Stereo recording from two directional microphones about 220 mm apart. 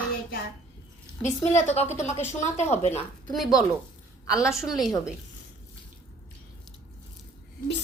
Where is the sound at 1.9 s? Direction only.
30° left (ahead or behind).